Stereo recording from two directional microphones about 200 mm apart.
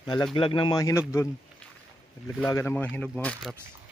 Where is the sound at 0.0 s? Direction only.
20° left (ahead or behind); by 3.5 s 5° left (ahead or behind).